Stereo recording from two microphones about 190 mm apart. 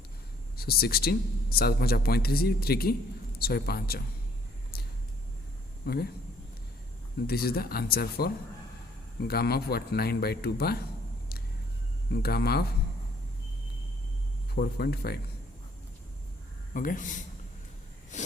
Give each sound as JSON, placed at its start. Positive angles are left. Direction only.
{"t": 0.5, "sound": "speech", "side_deg": 55}
{"t": 5.8, "sound": "speech", "side_deg": 55}
{"t": 7.3, "sound": "a man's voice", "side_deg": 55}
{"t": 12.1, "sound": "a man's voice", "side_deg": 55}
{"t": 14.5, "sound": "a man's voice", "side_deg": 55}
{"t": 16.7, "sound": "speech", "side_deg": 45}
{"t": 18.1, "sound": "a sound", "side_deg": 40}